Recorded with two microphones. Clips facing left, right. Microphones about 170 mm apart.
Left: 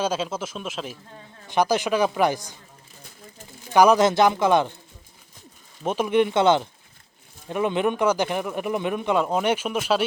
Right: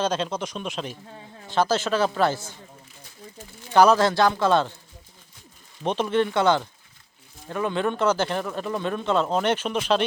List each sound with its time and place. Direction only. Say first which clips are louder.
0.0 s speech: even; 5° left (ahead or behind)
1.5 s speech: left 1 dB; 15° left (ahead or behind)
3.8 s speech: left 1 dB; 15° left (ahead or behind)
5.8 s speech: left 2 dB; 10° left (ahead or behind)